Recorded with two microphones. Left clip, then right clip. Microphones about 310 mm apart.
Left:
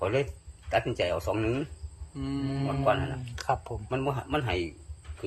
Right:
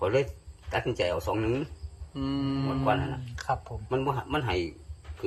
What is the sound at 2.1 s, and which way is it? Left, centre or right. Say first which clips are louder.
Speech: right 3 dB; centre.